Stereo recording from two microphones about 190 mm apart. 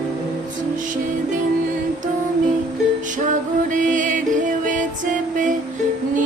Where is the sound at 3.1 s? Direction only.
40° right (ahead or behind).